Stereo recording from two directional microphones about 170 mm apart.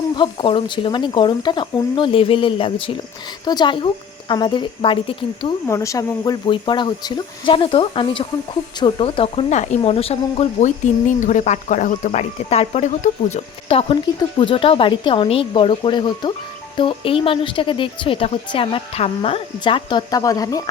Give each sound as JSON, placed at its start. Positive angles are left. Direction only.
{"t": 0.2, "sound": "speech", "side_deg": 30}
{"t": 5.6, "sound": "speech", "side_deg": 15}